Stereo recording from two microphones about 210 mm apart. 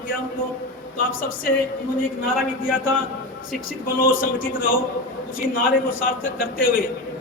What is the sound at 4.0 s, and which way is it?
A man's voice, 40° left (ahead or behind).